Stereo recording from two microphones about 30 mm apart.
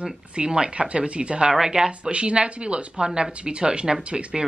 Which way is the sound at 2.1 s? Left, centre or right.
Right.